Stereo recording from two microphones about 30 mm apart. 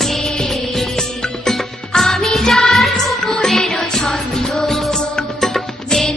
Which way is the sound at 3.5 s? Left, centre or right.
Centre.